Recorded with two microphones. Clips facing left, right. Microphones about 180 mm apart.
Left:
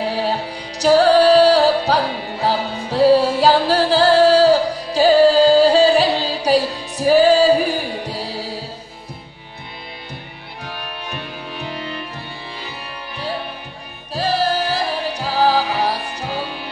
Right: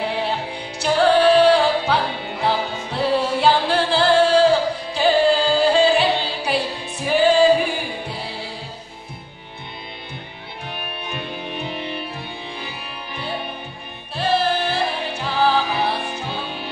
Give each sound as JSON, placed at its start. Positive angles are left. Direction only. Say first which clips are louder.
{"t": 0.1, "sound": "music", "louder": "left 3 dB", "side_deg": 40}
{"t": 14.1, "sound": "music", "louder": "left 1 dB", "side_deg": 40}